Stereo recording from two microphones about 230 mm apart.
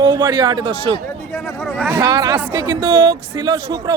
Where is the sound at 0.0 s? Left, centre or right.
Centre.